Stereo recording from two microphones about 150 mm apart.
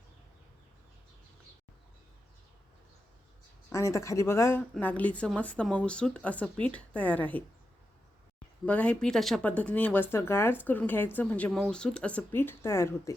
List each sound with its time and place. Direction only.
3.7 s speech: 20° left (ahead or behind)
8.6 s speech: 10° left (ahead or behind)